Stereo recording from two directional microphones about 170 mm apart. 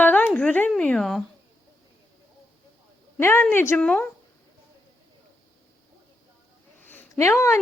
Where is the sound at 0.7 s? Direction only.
5° left (ahead or behind).